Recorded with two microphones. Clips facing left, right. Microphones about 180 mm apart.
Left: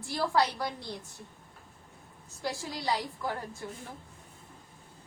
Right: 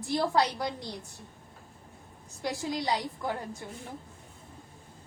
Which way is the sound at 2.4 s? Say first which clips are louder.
Right 3 dB; 20° right (ahead or behind).